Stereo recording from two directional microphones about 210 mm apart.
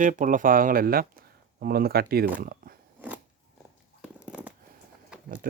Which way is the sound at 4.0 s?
5° right (ahead or behind).